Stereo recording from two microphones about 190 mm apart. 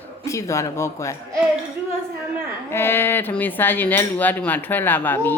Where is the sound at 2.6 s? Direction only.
10° left (ahead or behind).